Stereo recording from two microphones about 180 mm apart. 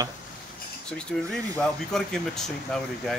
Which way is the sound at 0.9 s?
5° left (ahead or behind).